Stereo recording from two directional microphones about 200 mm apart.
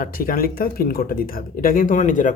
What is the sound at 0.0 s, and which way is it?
Speech, 45° left (ahead or behind).